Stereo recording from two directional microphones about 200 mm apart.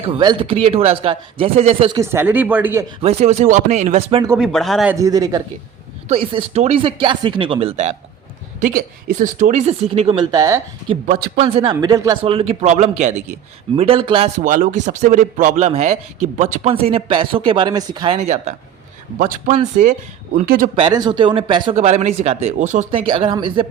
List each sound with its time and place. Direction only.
0.0 s a man's voice: 25° right (ahead or behind)
2.0 s speech: 10° right (ahead or behind)
3.0 s a man's voice: 30° right (ahead or behind)
4.4 s speech: centre (ahead or behind)
4.9 s speech: 15° right (ahead or behind)
6.1 s a man's voice: 30° right (ahead or behind)
8.6 s a man's voice: 40° right (ahead or behind); by 10.9 s 15° right (ahead or behind)
11.0 s a man's voice: 40° right (ahead or behind)
20.7 s a man's voice: 20° right (ahead or behind); by 22.9 s 35° right (ahead or behind)
22.9 s a man's voice: 25° right (ahead or behind)